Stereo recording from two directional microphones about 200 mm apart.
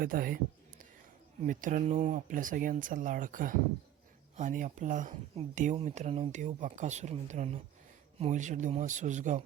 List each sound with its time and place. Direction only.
0.0 s a man's voice: 45° right (ahead or behind)
1.4 s speech: 40° right (ahead or behind)